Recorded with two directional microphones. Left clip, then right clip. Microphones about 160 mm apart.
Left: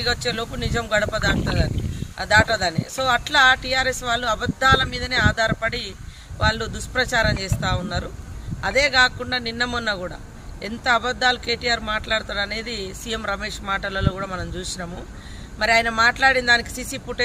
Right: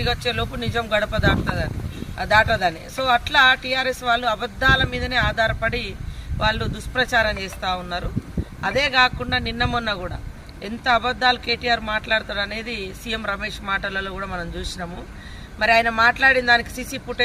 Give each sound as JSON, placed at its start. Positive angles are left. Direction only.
{"t": 0.0, "sound": "speech", "side_deg": 5}